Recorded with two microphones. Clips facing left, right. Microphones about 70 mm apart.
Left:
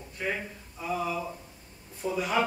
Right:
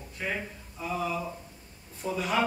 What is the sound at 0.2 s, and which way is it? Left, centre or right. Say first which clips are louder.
A man's voice: left 1 dB; centre.